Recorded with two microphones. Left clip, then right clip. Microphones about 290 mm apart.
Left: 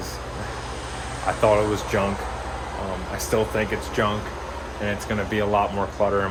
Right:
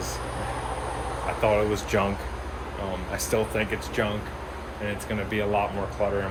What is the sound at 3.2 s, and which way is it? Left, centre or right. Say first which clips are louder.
Speech: left 3 dB; centre.